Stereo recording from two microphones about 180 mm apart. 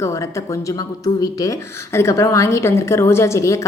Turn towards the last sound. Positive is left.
turn(degrees=15)  # may be behind; listen again after turning